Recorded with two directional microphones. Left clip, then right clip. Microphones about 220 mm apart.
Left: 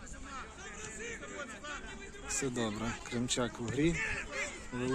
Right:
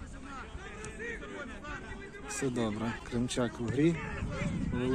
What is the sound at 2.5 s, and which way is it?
Speech, 5° left (ahead or behind).